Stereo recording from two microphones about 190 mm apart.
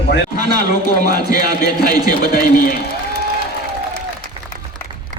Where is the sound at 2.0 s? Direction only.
50° left (ahead or behind).